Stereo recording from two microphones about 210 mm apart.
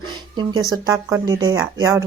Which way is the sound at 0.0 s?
20° right (ahead or behind).